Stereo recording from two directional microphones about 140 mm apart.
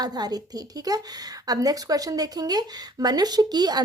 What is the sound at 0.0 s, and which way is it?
Speech, 30° right (ahead or behind).